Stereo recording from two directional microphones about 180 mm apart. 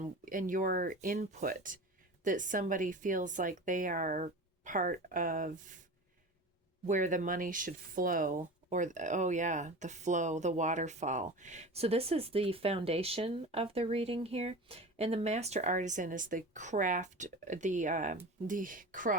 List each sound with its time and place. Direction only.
0.0 s speech: 50° right (ahead or behind)
6.8 s speech: 45° right (ahead or behind)